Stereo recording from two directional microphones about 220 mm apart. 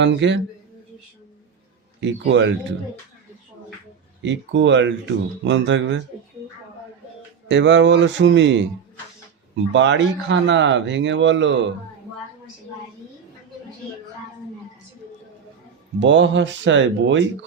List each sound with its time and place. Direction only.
0.0 s speech: 55° right (ahead or behind)
2.0 s speech: 55° right (ahead or behind)
4.2 s speech: 55° right (ahead or behind)
7.4 s speech: 55° right (ahead or behind)
9.7 s speech: 55° right (ahead or behind)
16.0 s speech: 55° right (ahead or behind)